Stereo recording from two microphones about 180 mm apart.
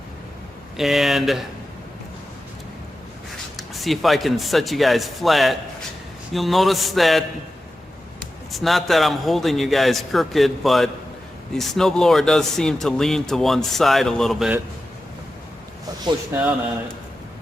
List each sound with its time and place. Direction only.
0.8 s speech: centre (ahead or behind)
3.6 s speech: centre (ahead or behind)
8.5 s speech: centre (ahead or behind)
16.3 s speech: 5° right (ahead or behind)